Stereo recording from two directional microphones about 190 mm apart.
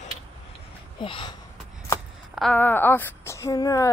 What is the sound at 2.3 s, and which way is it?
A woman's voice, 5° left (ahead or behind).